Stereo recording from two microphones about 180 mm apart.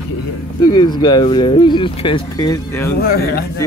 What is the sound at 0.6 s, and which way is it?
Speech, 25° left (ahead or behind).